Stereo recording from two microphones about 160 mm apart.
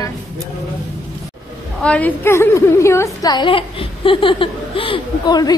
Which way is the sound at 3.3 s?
35° left (ahead or behind).